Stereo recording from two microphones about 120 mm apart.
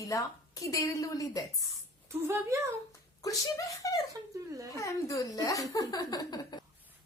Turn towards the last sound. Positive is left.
turn(degrees=35)  # may be behind; listen again after turning